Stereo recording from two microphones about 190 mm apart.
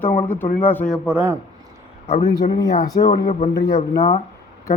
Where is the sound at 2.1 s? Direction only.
35° left (ahead or behind).